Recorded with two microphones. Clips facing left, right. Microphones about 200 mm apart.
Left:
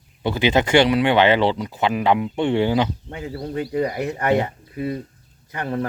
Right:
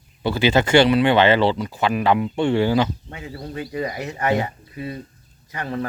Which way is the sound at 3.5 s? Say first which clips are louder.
Left 4 dB; 55° left (ahead or behind).